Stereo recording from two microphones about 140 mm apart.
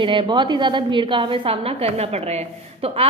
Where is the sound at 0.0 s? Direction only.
35° right (ahead or behind).